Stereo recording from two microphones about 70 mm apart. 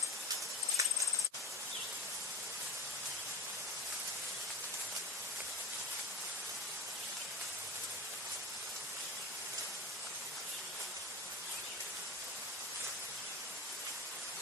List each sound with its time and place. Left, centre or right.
0.8 s cricket: right